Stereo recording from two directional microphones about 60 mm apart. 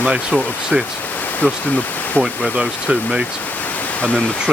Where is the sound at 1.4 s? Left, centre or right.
Left.